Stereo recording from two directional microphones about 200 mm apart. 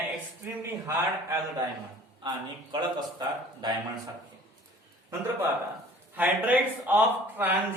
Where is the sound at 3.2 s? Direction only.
20° right (ahead or behind).